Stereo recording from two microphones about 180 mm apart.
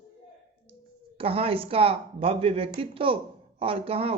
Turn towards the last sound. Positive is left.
turn(degrees=-35)  # may be behind; listen again after turning